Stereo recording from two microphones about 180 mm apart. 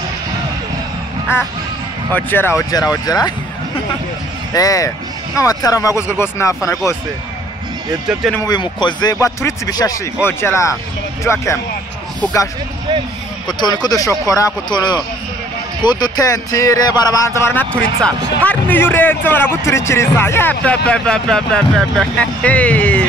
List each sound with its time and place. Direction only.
2.1 s speech: 10° left (ahead or behind)
8.1 s speech: centre (ahead or behind)
8.4 s speech: 25° left (ahead or behind)
13.5 s speech: 25° left (ahead or behind); by 23.0 s 10° left (ahead or behind)